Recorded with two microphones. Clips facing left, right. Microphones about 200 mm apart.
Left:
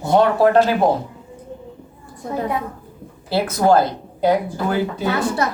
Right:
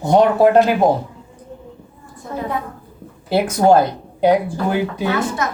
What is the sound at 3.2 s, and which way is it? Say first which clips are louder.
Speech: right 2 dB; 20° right (ahead or behind).